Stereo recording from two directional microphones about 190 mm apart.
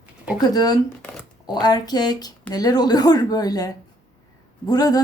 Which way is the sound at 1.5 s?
20° left (ahead or behind).